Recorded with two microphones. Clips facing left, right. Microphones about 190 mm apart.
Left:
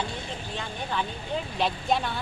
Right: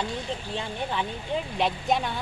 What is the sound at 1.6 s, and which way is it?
Speech, 20° right (ahead or behind).